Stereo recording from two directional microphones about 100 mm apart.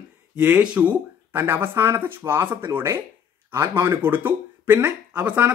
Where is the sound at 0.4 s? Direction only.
15° right (ahead or behind).